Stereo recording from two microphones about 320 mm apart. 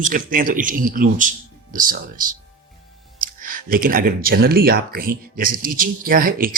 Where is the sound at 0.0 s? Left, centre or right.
Right.